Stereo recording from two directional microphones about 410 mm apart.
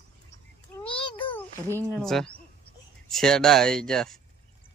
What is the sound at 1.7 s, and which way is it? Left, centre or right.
Speech, centre.